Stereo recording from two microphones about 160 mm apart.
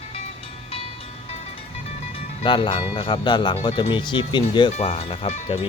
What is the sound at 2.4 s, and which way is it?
Speech, 30° left (ahead or behind).